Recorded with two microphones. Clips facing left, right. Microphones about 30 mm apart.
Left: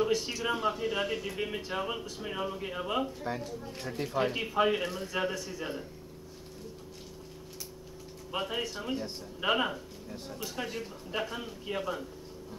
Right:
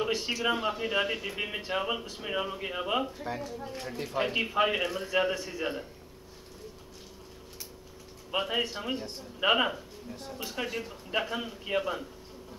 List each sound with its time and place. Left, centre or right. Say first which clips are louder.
0.0 s speech: right 1 dB; centre
3.3 s a man's voice: right 1 dB; centre; by 5.9 s right
8.3 s a man's voice: right 4 dB; centre